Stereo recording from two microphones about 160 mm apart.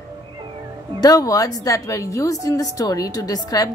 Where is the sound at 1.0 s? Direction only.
25° left (ahead or behind).